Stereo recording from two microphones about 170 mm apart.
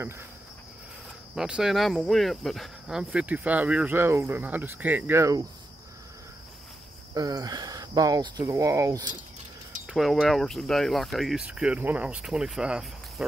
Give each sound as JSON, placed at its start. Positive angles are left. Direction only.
{"t": 1.3, "sound": "speech", "side_deg": -5}
{"t": 7.2, "sound": "speech", "side_deg": -20}
{"t": 9.8, "sound": "speech", "side_deg": 0}